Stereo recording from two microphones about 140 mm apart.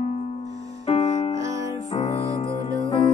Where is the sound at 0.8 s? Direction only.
45° left (ahead or behind).